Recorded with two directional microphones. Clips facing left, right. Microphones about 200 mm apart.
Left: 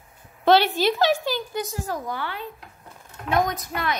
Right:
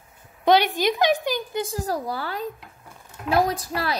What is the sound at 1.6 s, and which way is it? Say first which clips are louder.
A woman's voice: right 3 dB; 35° right (ahead or behind).